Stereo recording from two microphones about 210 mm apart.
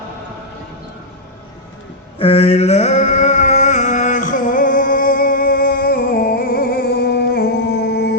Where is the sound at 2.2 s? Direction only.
25° left (ahead or behind).